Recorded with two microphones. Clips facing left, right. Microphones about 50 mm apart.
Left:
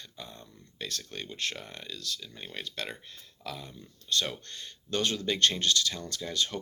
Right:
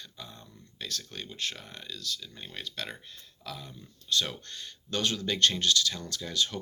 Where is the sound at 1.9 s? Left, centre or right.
Left.